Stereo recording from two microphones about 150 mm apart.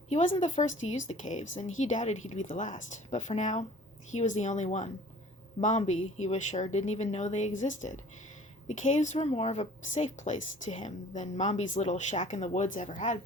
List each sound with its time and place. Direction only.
0.1 s a woman's voice: 50° left (ahead or behind)